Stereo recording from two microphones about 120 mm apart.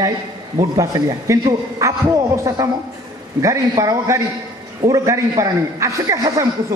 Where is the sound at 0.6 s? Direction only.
30° right (ahead or behind).